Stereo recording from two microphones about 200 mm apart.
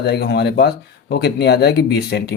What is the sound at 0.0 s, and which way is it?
Speech, 55° left (ahead or behind).